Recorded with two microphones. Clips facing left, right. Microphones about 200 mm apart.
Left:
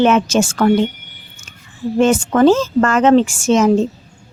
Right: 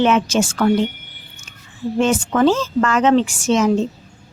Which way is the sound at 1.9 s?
50° left (ahead or behind).